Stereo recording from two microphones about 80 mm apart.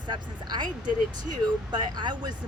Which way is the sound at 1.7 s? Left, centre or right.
Right.